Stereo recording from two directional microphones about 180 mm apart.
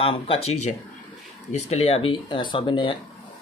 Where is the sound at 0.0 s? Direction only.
30° left (ahead or behind).